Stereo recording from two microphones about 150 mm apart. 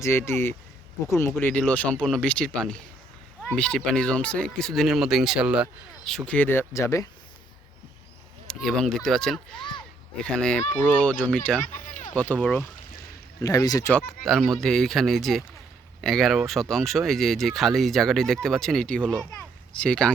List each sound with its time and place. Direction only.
0.0 s speech: 15° left (ahead or behind); by 5.6 s 5° right (ahead or behind)
6.1 s speech: 5° left (ahead or behind); by 7.1 s 20° left (ahead or behind)
8.4 s speech: 5° left (ahead or behind)
11.7 s a sound: 55° left (ahead or behind)
12.1 s speech: 10° left (ahead or behind)
13.4 s speech: 25° left (ahead or behind)
14.3 s speech: centre (ahead or behind)